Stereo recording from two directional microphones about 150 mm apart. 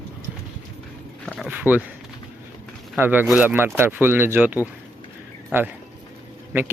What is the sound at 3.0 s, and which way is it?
Speech, 15° right (ahead or behind).